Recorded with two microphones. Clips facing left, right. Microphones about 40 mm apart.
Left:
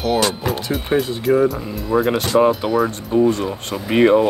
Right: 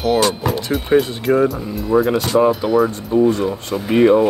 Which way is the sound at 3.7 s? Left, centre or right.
Left.